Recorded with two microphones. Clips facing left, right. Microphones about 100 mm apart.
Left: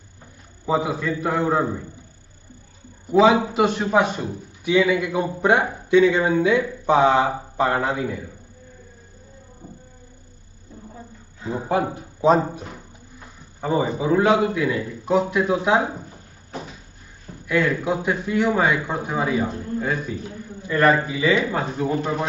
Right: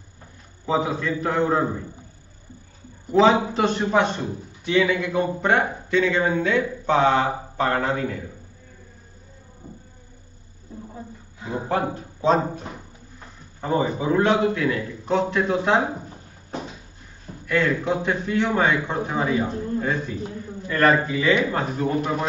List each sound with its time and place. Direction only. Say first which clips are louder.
0.7 s a man's voice: left 1 dB; 5° left (ahead or behind)
3.1 s a man's voice: left 1 dB; 5° left (ahead or behind)
11.9 s a man's voice: left 4 dB; 10° left (ahead or behind)
17.5 s a man's voice: left 1 dB; 10° left (ahead or behind)